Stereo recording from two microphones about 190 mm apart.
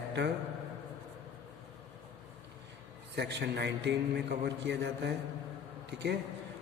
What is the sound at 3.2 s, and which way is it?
A man's voice, 65° right (ahead or behind).